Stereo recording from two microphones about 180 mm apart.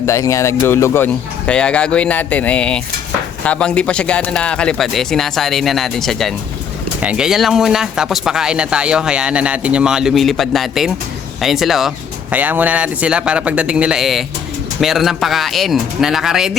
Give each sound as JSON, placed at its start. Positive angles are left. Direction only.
{"t": 0.0, "sound": "a man's voice", "side_deg": 15}